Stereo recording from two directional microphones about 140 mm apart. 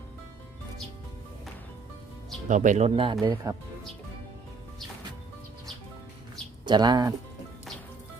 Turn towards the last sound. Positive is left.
turn(degrees=-30)  # may be behind; listen again after turning